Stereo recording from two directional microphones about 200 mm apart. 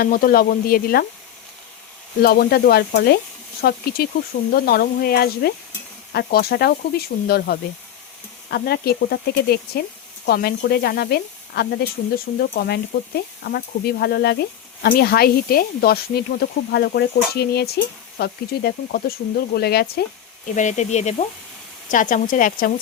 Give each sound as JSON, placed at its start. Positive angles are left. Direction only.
{"t": 0.0, "sound": "speech", "side_deg": 45}
{"t": 2.2, "sound": "speech", "side_deg": 50}